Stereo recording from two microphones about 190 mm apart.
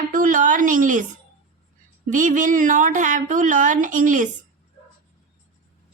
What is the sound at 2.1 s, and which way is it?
A woman's voice, 45° right (ahead or behind).